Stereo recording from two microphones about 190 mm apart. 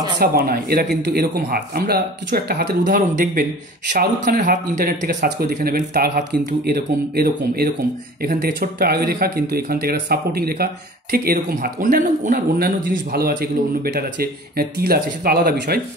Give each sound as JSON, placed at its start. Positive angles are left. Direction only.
{"t": 0.2, "sound": "speech", "side_deg": -55}